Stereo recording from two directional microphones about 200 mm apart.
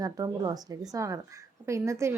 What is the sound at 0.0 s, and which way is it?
A woman's voice, 20° right (ahead or behind).